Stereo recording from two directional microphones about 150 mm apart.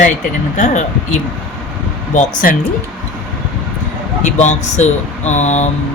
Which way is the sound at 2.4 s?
65° left (ahead or behind).